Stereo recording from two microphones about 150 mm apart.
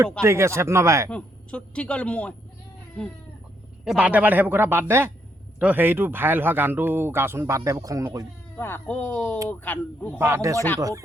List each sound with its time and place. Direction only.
0.2 s speech: 20° right (ahead or behind)
1.1 s speech: 5° left (ahead or behind)
3.8 s speech: 10° right (ahead or behind)
8.5 s speech: 15° left (ahead or behind)
10.2 s speech: 15° right (ahead or behind)